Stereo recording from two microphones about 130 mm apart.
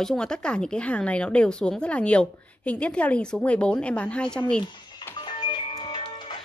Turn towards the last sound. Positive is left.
turn(degrees=40)  # may be behind; listen again after turning